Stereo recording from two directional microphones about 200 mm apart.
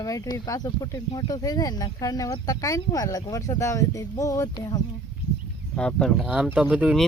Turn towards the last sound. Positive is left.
turn(degrees=-5)  # may be behind; listen again after turning